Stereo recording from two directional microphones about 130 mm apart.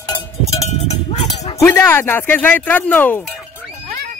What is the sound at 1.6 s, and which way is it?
A man's voice, 20° left (ahead or behind).